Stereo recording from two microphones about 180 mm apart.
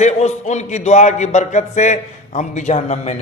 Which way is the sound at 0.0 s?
40° left (ahead or behind).